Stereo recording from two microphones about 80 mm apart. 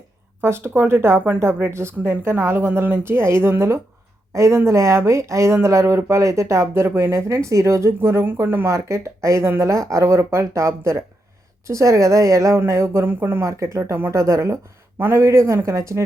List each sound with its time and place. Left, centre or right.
0.4 s speech: right
8.6 s speech: right
13.4 s speech: right